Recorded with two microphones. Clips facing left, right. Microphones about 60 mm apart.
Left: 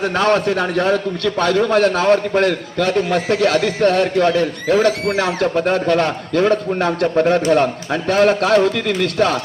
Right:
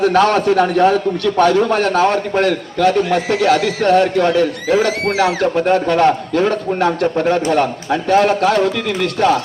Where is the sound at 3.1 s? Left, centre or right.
Right.